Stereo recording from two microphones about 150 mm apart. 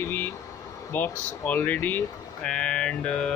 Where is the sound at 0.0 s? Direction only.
15° left (ahead or behind).